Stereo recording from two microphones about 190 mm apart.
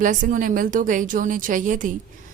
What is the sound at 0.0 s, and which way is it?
Speech, 45° right (ahead or behind).